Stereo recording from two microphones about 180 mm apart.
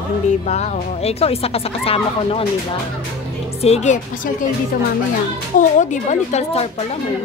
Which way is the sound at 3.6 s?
40° left (ahead or behind).